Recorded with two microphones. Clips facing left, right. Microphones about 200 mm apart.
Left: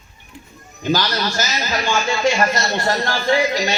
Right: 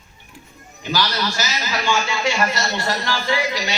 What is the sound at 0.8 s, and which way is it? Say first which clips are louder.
Speech: left 3 dB; 45° left (ahead or behind).